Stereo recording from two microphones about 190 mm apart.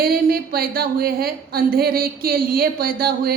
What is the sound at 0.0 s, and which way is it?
A woman's voice, 50° right (ahead or behind).